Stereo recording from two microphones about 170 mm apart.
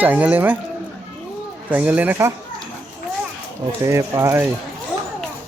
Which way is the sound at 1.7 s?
10° right (ahead or behind).